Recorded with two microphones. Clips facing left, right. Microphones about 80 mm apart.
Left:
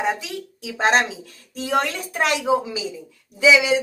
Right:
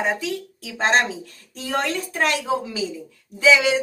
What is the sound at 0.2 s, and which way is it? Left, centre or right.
A woman's voice, left.